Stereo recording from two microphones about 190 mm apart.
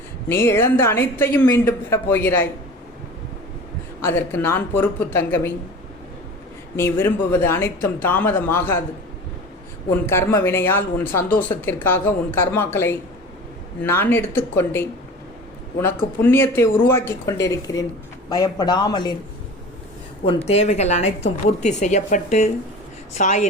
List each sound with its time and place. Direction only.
0.3 s a woman's voice: 10° left (ahead or behind)
4.0 s a woman's voice: 10° left (ahead or behind)
6.7 s a woman's voice: 10° left (ahead or behind)
9.9 s a woman's voice: 10° left (ahead or behind)
16.2 s a woman's voice: 10° left (ahead or behind)
20.2 s speech: 35° left (ahead or behind)